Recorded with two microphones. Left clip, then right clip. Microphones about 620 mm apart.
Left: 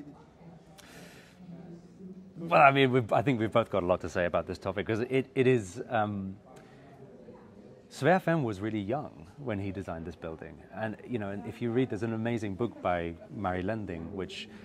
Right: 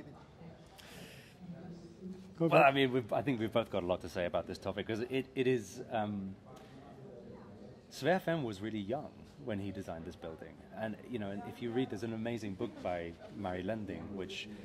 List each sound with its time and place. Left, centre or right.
2.5 s speech: left
7.9 s speech: left